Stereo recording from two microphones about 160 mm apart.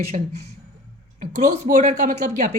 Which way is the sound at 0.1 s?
45° right (ahead or behind).